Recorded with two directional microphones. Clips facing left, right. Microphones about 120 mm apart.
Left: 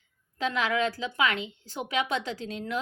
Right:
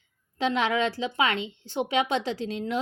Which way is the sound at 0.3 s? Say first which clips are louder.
Right 3 dB; 30° right (ahead or behind).